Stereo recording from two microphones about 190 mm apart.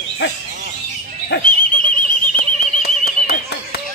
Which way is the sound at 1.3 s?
50° left (ahead or behind).